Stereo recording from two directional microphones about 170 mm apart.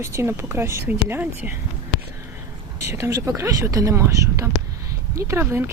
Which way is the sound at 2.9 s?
15° right (ahead or behind).